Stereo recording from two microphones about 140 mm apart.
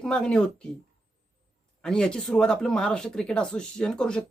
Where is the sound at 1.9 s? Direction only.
5° left (ahead or behind).